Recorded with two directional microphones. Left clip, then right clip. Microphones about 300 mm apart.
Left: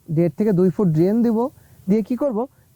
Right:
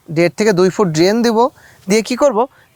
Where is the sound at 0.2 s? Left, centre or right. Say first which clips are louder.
Right 7 dB; centre.